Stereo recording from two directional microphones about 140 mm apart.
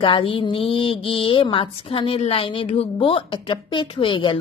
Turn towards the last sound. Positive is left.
turn(degrees=35)  # may be behind; listen again after turning